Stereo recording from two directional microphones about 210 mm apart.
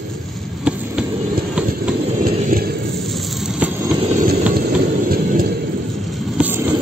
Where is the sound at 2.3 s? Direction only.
40° right (ahead or behind).